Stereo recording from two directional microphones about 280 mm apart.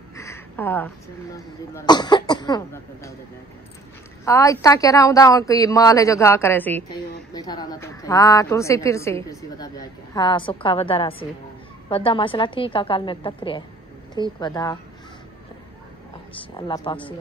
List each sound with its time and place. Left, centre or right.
0.1 s a sound: centre
1.9 s a woman's voice: centre
4.2 s a woman's voice: centre
16.3 s a woman's voice: centre